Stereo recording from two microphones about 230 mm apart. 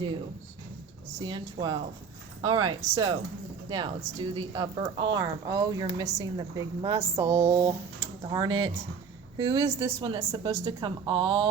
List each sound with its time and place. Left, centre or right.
1.2 s speech: right